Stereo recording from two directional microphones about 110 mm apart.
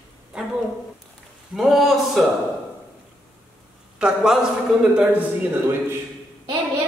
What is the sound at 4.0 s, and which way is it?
A woman's voice, 10° right (ahead or behind).